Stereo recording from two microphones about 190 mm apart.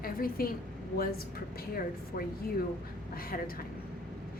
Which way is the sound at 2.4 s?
55° left (ahead or behind).